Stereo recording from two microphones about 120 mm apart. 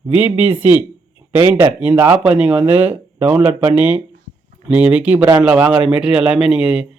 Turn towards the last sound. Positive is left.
turn(degrees=-5)  # may be behind; listen again after turning